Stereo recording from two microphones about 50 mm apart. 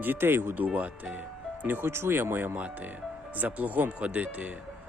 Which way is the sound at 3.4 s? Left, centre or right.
Right.